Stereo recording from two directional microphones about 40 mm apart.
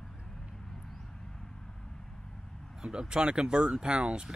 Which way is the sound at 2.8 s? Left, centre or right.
Centre.